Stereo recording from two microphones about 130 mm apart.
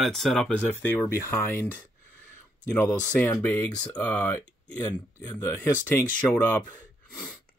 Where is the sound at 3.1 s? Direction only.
15° left (ahead or behind).